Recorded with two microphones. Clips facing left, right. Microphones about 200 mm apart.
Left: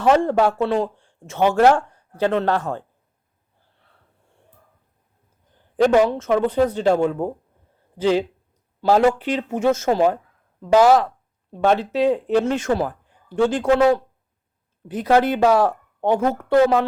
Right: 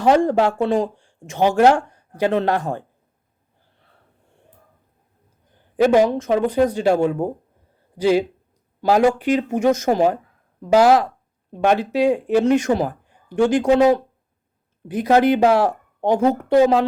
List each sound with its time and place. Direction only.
0.0 s speech: 15° right (ahead or behind)
5.7 s speech: 10° right (ahead or behind)
11.5 s speech: 15° right (ahead or behind)